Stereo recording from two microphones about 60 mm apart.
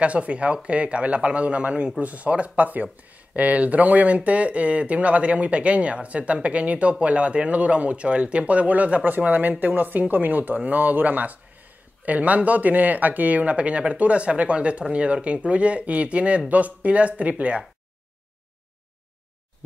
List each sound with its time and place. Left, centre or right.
0.0 s speech: right